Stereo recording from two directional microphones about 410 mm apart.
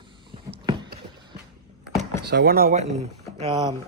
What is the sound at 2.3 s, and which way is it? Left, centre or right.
Speech, right.